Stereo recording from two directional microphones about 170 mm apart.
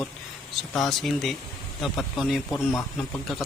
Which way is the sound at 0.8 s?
Centre (ahead or behind).